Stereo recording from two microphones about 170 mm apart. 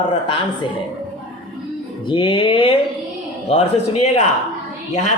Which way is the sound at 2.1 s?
30° left (ahead or behind).